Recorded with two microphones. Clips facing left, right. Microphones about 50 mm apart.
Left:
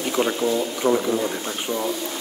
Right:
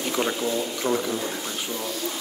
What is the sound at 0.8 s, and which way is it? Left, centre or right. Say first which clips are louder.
Speech: left 5 dB; left.